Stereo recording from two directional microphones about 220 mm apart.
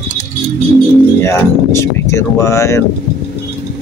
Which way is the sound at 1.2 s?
10° left (ahead or behind).